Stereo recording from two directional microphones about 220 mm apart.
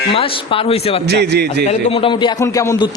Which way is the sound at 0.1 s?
25° left (ahead or behind).